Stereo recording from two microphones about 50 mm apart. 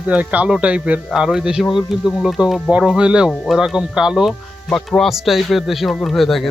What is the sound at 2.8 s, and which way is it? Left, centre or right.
Speech, centre.